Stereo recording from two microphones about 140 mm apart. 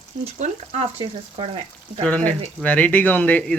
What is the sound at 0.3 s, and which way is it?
Frying, 55° right (ahead or behind).